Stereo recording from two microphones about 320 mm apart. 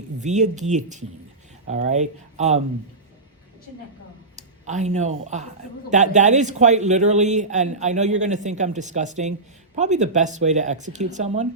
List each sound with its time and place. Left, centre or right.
0.2 s a man's voice: right
4.4 s a man's voice: right